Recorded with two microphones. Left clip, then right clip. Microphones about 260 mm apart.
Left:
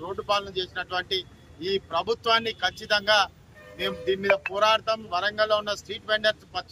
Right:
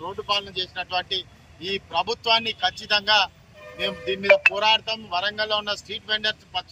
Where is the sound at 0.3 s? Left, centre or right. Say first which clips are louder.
Right 1 dB; centre.